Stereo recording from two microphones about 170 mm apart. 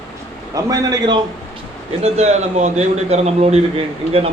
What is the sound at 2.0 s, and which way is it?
A man's voice, 40° right (ahead or behind).